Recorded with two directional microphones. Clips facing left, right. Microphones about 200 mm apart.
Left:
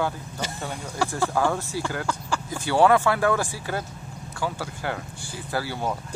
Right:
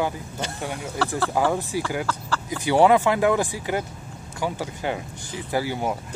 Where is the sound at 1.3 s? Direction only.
15° right (ahead or behind).